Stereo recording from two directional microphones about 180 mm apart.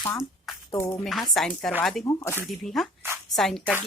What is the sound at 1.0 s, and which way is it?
Speech, centre (ahead or behind).